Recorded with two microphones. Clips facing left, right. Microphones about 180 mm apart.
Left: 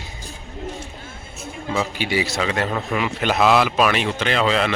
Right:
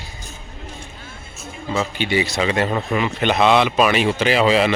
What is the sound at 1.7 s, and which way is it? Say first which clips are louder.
Speech: right 2 dB; 5° left (ahead or behind).